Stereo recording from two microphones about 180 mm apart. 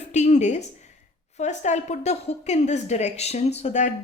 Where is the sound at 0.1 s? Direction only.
40° left (ahead or behind).